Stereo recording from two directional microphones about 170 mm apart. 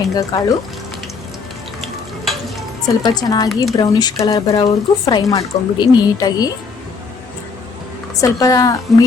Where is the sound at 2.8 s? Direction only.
25° left (ahead or behind).